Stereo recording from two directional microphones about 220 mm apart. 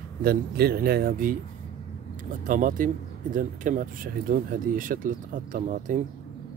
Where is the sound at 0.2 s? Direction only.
45° right (ahead or behind).